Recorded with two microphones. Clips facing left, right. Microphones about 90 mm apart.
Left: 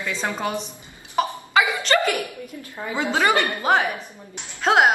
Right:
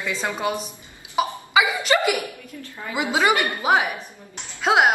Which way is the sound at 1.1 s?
10° right (ahead or behind).